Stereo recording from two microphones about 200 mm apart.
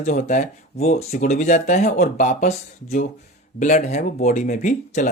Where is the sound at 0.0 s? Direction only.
40° left (ahead or behind).